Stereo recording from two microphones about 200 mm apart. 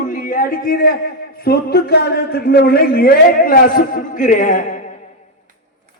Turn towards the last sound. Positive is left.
turn(degrees=40)  # may be behind; listen again after turning